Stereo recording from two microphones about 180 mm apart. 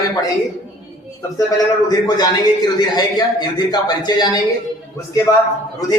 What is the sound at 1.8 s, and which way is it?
A man's voice, 20° left (ahead or behind).